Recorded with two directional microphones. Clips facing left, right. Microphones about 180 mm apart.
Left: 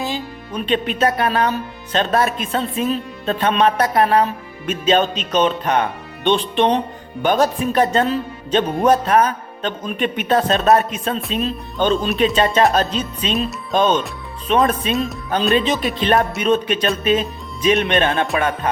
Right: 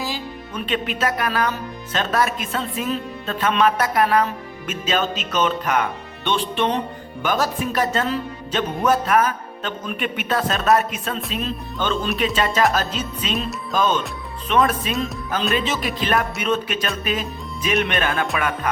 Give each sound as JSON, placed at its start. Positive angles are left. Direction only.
{"t": 0.0, "sound": "speech", "side_deg": 25}
{"t": 6.2, "sound": "speech", "side_deg": 20}
{"t": 7.3, "sound": "speech", "side_deg": 30}
{"t": 11.8, "sound": "speech", "side_deg": 20}
{"t": 13.3, "sound": "music", "side_deg": 0}
{"t": 14.6, "sound": "speech", "side_deg": 30}